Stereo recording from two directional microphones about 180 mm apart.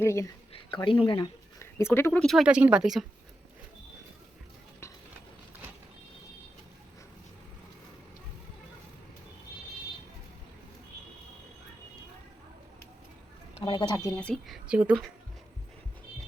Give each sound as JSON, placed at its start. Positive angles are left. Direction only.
{"t": 0.0, "sound": "speech", "side_deg": 15}
{"t": 0.5, "sound": "speech", "side_deg": 30}
{"t": 1.5, "sound": "speech", "side_deg": 15}
{"t": 2.2, "sound": "speech", "side_deg": 0}
{"t": 13.7, "sound": "speech", "side_deg": 25}